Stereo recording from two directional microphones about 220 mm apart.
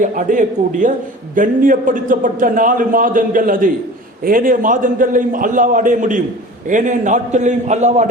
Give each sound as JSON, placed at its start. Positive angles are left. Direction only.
{"t": 0.0, "sound": "a man's voice", "side_deg": -35}